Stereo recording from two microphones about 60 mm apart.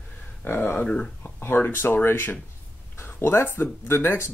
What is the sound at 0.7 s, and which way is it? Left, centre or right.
Speech, centre.